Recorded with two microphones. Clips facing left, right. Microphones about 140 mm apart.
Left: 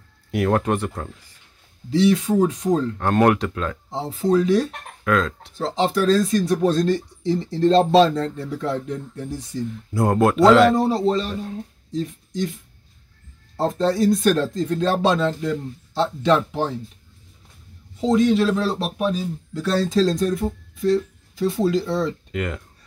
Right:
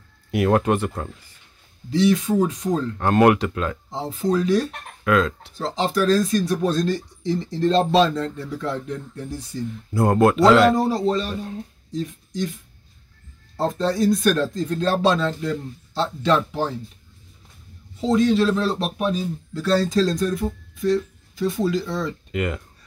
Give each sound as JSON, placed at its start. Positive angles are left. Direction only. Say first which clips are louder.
{"t": 0.3, "sound": "speech", "louder": "right 1 dB", "side_deg": -5}
{"t": 1.9, "sound": "speech", "louder": "left 1 dB", "side_deg": 30}
{"t": 3.0, "sound": "speech", "louder": "right 4 dB", "side_deg": -5}
{"t": 3.9, "sound": "speech", "louder": "left 4 dB", "side_deg": 25}
{"t": 5.0, "sound": "speech", "louder": "right 1 dB", "side_deg": -5}
{"t": 5.6, "sound": "speech", "louder": "left 1 dB", "side_deg": 25}
{"t": 8.8, "sound": "speech", "louder": "left 1 dB", "side_deg": 20}
{"t": 9.9, "sound": "speech", "louder": "right 1 dB", "side_deg": 0}
{"t": 10.9, "sound": "speech", "louder": "left 1 dB", "side_deg": 25}
{"t": 13.6, "sound": "speech", "louder": "left 2 dB", "side_deg": 25}
{"t": 18.0, "sound": "speech", "louder": "left 1 dB", "side_deg": 15}
{"t": 19.8, "sound": "speech", "louder": "left 1 dB", "side_deg": 25}
{"t": 22.3, "sound": "speech", "louder": "right 2 dB", "side_deg": -5}